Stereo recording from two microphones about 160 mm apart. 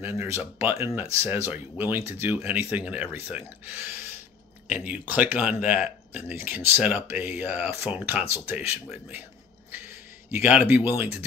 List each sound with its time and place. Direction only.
0.0 s speech: 15° right (ahead or behind)